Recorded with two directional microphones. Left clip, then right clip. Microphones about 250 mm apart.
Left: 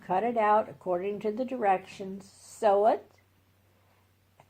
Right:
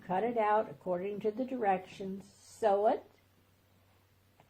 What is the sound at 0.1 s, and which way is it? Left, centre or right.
Speech, left.